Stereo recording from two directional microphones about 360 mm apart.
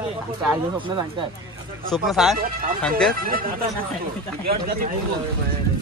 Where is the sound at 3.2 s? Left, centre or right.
Right.